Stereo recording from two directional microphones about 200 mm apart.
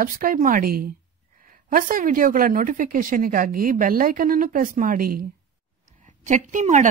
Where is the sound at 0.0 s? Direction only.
45° right (ahead or behind).